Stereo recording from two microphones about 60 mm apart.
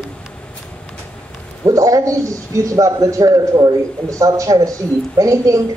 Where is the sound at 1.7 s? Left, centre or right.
Right.